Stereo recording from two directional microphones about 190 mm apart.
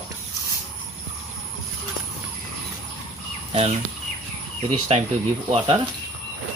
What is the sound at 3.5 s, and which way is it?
Speech, 30° right (ahead or behind).